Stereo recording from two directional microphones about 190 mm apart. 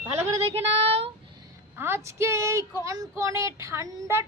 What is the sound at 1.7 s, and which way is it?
Speech, 10° right (ahead or behind).